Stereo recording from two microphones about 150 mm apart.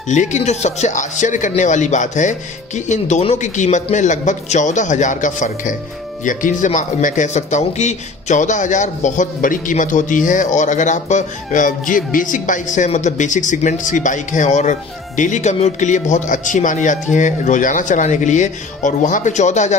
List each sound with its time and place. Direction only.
0.1 s a man's voice: 50° left (ahead or behind)